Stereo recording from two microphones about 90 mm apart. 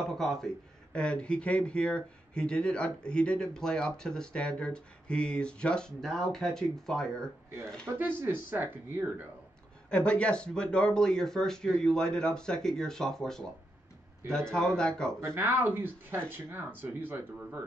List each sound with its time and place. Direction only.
0.2 s speech: 5° left (ahead or behind)
8.0 s speech: 25° right (ahead or behind)
9.8 s speech: 10° left (ahead or behind)
15.1 s speech: 25° right (ahead or behind)